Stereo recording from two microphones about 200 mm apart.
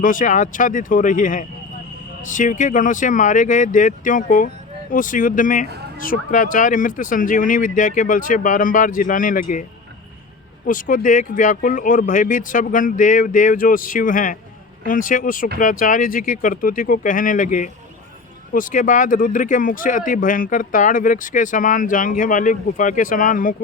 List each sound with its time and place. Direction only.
0.0 s speech: 40° left (ahead or behind)
10.7 s speech: 40° left (ahead or behind)